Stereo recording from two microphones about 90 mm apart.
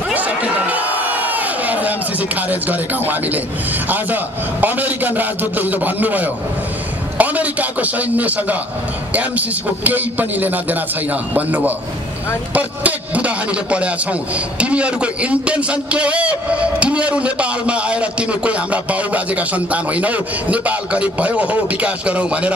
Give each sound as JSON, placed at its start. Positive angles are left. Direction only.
{"t": 0.1, "sound": "crowd", "side_deg": -20}
{"t": 3.9, "sound": "a man's voice", "side_deg": -20}